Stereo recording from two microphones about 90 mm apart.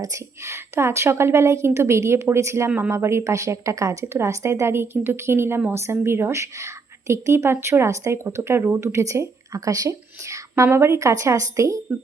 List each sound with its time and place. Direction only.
0.0 s a woman's voice: 35° right (ahead or behind)